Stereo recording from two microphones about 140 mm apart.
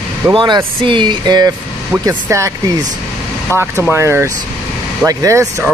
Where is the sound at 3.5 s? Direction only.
15° right (ahead or behind).